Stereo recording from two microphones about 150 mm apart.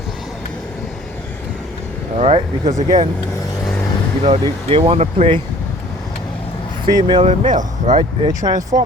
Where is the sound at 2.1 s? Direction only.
45° right (ahead or behind).